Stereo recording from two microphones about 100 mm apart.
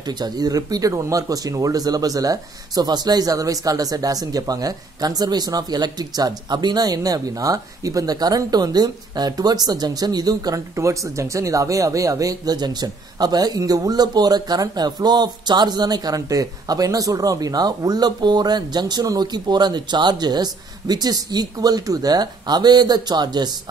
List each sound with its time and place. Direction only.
0.0 s speech: 45° right (ahead or behind)